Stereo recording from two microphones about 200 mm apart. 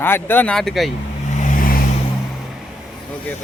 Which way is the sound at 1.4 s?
40° left (ahead or behind).